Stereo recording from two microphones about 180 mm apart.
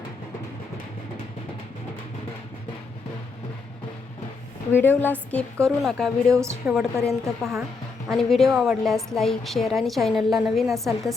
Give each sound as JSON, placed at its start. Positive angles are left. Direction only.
{"t": 4.7, "sound": "a woman's voice", "side_deg": 10}
{"t": 6.3, "sound": "a woman's voice", "side_deg": -15}
{"t": 6.7, "sound": "a woman's voice", "side_deg": 0}